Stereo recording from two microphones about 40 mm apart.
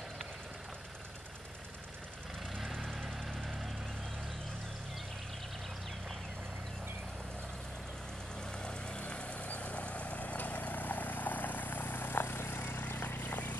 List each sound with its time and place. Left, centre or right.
2.5 s vehicle: centre
8.5 s vehicle: left
12.7 s a sound: left